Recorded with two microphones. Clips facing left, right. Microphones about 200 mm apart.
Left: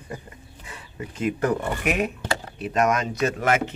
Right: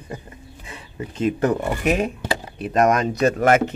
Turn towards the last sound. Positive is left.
turn(degrees=-40)  # may be behind; listen again after turning